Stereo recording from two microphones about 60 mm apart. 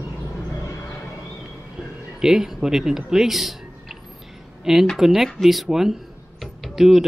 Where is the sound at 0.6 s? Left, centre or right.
Left.